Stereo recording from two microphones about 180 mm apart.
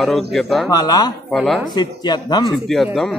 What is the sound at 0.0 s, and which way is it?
Speech, centre (ahead or behind).